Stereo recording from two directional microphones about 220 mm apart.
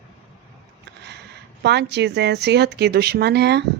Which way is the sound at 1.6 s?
50° right (ahead or behind).